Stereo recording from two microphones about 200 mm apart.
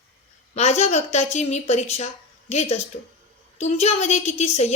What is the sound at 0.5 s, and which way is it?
A woman's voice, 35° left (ahead or behind).